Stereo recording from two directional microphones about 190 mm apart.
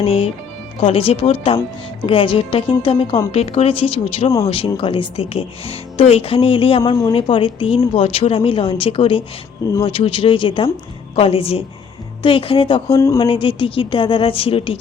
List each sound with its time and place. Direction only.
0.0 s a woman's voice: 30° left (ahead or behind)